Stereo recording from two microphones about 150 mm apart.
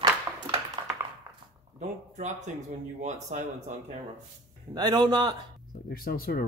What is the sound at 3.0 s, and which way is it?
Speech, 50° right (ahead or behind).